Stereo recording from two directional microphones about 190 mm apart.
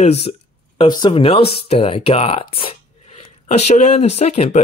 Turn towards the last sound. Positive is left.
turn(degrees=35)  # may be behind; listen again after turning